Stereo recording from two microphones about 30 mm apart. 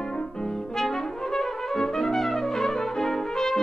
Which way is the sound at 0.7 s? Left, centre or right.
Centre.